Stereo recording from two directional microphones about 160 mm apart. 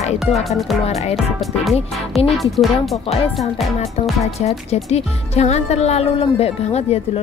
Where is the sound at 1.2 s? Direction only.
Centre (ahead or behind).